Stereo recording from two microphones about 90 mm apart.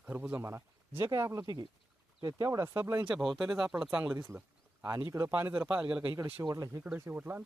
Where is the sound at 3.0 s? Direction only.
5° right (ahead or behind).